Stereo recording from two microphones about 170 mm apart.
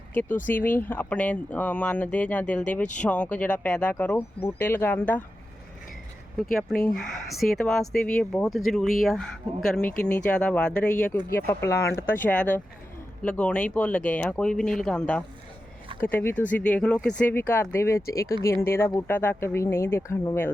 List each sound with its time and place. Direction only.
0.1 s speech: 10° left (ahead or behind)
6.4 s speech: centre (ahead or behind)